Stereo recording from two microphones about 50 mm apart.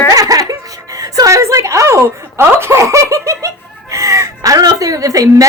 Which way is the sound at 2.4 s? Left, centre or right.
Right.